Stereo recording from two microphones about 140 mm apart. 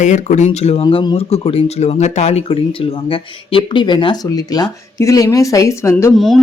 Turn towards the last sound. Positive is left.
turn(degrees=0)  # may be behind; listen again after turning